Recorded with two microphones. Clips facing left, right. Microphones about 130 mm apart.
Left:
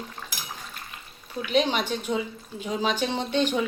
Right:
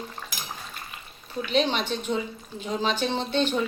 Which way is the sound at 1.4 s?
10° left (ahead or behind).